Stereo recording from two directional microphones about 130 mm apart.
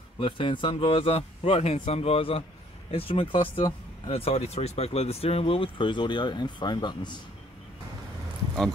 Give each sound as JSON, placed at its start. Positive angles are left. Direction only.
{"t": 0.2, "sound": "speech", "side_deg": 40}